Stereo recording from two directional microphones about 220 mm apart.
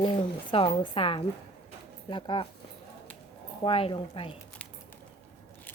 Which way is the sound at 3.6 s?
25° left (ahead or behind).